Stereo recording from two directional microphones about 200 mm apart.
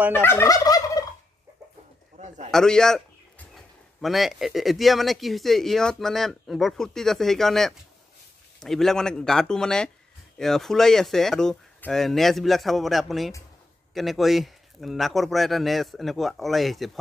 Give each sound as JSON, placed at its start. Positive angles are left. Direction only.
{"t": 0.1, "sound": "fowl", "side_deg": 10}
{"t": 2.1, "sound": "a sound", "side_deg": -35}
{"t": 2.5, "sound": "a man's voice", "side_deg": 5}